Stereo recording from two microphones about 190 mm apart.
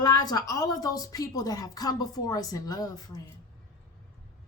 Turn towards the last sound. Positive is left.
turn(degrees=20)  # may be behind; listen again after turning